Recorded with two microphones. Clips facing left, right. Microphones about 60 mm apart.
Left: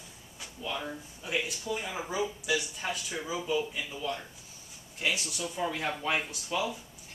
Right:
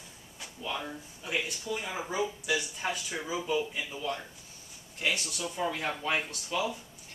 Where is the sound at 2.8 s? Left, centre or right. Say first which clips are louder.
Right 1 dB; centre.